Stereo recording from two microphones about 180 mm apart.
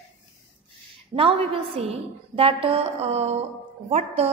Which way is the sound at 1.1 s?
30° right (ahead or behind).